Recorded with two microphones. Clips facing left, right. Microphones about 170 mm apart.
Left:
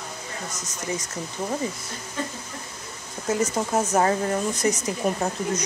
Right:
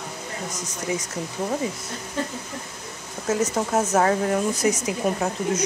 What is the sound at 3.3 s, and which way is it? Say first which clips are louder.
Speech: right 1 dB; 5° right (ahead or behind).